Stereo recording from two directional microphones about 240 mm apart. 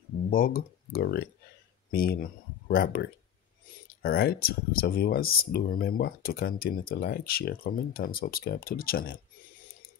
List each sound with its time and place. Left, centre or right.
0.3 s speech: left